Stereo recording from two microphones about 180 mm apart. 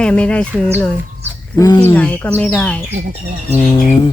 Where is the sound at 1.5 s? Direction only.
20° left (ahead or behind).